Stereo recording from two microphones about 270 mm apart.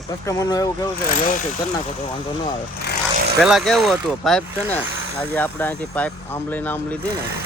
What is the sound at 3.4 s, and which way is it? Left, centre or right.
Speech, centre.